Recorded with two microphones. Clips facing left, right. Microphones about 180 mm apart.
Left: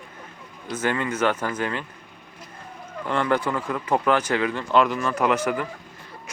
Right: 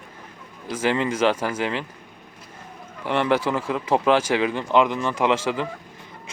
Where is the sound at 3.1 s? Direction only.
20° right (ahead or behind).